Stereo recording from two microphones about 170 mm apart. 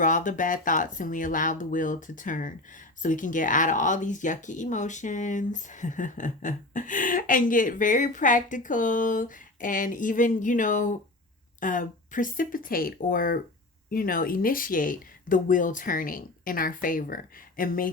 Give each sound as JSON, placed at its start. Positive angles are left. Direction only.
{"t": 0.0, "sound": "speech", "side_deg": 50}